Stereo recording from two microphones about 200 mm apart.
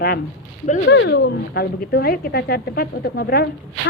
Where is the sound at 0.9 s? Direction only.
60° left (ahead or behind).